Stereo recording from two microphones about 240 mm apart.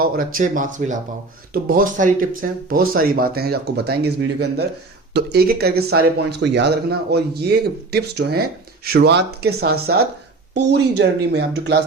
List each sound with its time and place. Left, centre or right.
0.0 s speech: right